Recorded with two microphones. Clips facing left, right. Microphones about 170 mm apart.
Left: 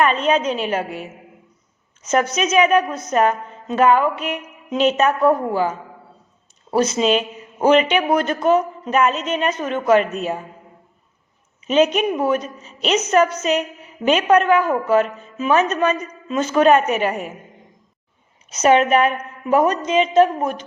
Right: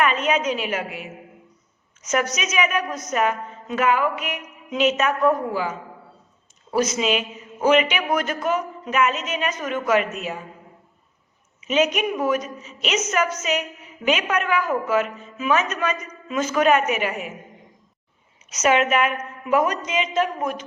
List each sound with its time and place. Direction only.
0.0 s a woman's voice: 30° left (ahead or behind)
11.6 s a woman's voice: 35° left (ahead or behind)
18.5 s a woman's voice: 35° left (ahead or behind)